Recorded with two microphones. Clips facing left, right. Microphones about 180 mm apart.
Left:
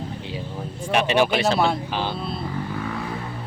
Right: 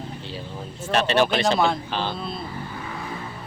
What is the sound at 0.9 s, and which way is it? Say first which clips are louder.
Speech: left 1 dB; 10° left (ahead or behind).